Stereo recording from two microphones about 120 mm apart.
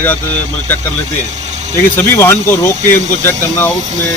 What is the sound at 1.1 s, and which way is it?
Speech, 75° right (ahead or behind).